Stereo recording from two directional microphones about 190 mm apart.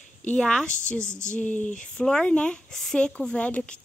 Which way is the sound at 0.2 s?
5° left (ahead or behind).